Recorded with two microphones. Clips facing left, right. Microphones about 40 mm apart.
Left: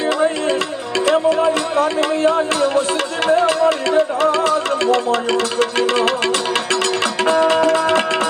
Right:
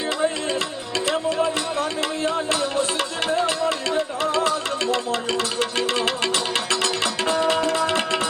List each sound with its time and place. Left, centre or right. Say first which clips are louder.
1.1 s music: left 8 dB; left